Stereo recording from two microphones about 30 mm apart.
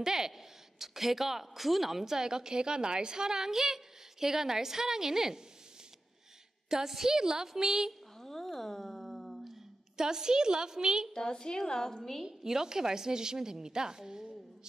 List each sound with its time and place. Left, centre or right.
0.0 s a woman's voice: centre
6.7 s a woman's voice: centre
8.2 s a sound: centre
9.9 s a woman's voice: right
11.1 s a woman's voice: left
12.3 s a woman's voice: centre